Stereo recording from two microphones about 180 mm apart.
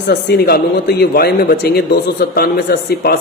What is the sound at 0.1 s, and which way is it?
A man's voice, 65° left (ahead or behind).